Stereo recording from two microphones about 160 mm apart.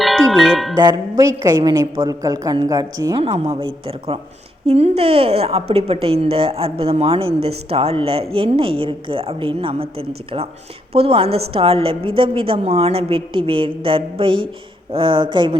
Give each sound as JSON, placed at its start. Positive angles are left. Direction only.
{"t": 0.0, "sound": "music", "side_deg": 0}
{"t": 0.8, "sound": "a woman's voice", "side_deg": -25}
{"t": 3.2, "sound": "a woman's voice", "side_deg": -35}